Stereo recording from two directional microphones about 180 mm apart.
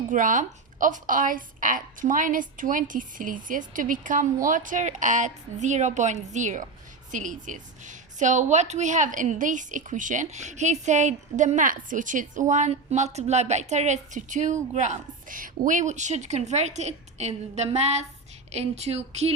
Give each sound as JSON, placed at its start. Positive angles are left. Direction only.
{"t": 0.1, "sound": "a woman's voice", "side_deg": -45}